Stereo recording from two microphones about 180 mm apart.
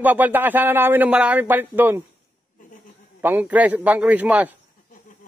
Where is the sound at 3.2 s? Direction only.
10° right (ahead or behind).